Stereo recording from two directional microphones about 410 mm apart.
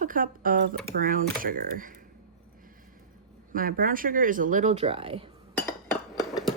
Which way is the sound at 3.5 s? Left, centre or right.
Right.